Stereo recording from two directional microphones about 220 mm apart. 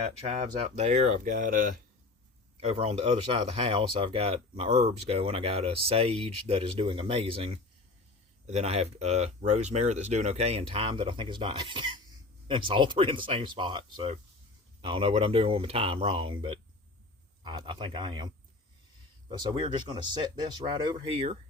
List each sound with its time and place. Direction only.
0.8 s speech: 30° right (ahead or behind)
19.3 s speech: 20° right (ahead or behind)